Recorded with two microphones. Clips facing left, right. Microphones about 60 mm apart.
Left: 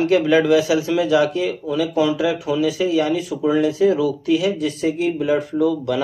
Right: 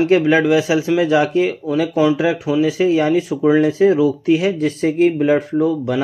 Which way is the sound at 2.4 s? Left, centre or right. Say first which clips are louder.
Right 4 dB; right.